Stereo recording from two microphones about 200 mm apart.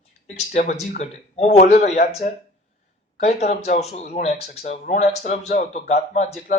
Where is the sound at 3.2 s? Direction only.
35° left (ahead or behind).